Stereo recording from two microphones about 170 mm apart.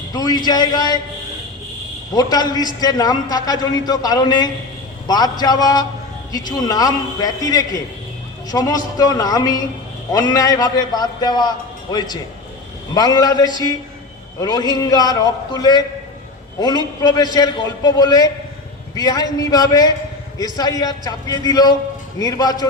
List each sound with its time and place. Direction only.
0.1 s a man's voice: 25° left (ahead or behind)
2.1 s a man's voice: 25° left (ahead or behind)